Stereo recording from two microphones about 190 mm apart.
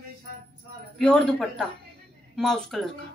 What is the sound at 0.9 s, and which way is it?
A woman's voice, 5° left (ahead or behind).